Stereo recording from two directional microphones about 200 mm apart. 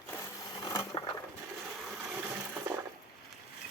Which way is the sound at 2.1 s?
10° right (ahead or behind).